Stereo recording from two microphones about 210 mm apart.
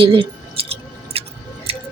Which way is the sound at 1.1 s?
25° right (ahead or behind).